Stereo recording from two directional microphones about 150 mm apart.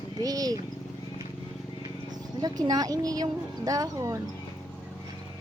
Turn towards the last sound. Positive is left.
turn(degrees=-20)  # may be behind; listen again after turning